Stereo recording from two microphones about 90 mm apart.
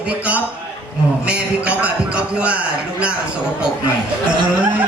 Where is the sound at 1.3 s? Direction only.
15° right (ahead or behind).